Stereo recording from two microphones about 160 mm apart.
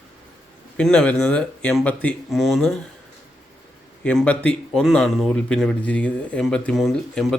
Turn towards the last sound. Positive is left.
turn(degrees=0)  # may be behind; listen again after turning